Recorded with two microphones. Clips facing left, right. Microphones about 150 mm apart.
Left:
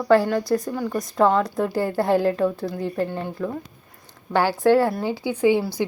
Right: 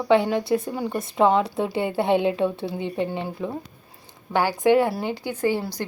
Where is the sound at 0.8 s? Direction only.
20° right (ahead or behind).